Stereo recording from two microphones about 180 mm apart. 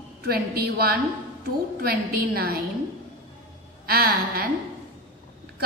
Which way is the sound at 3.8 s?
55° right (ahead or behind).